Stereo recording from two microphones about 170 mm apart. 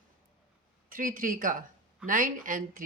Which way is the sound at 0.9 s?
55° right (ahead or behind).